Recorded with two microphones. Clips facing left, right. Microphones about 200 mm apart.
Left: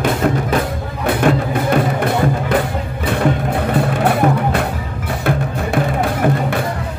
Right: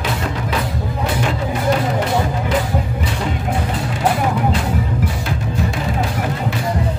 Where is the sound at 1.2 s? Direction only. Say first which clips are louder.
Left 7 dB; 55° left (ahead or behind).